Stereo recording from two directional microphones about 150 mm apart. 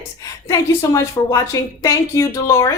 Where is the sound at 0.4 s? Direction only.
20° left (ahead or behind).